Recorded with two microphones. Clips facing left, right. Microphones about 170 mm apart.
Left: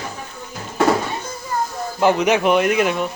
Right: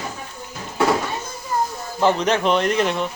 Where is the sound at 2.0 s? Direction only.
10° left (ahead or behind).